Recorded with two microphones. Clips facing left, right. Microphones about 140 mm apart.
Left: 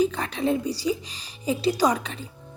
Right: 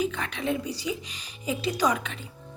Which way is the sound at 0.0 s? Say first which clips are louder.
Left 5 dB; 35° left (ahead or behind).